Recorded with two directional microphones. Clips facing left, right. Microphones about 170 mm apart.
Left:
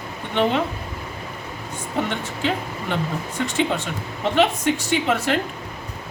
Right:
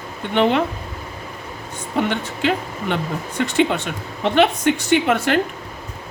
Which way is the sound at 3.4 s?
65° right (ahead or behind).